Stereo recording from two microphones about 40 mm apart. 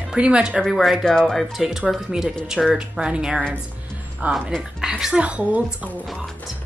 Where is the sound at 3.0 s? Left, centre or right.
Right.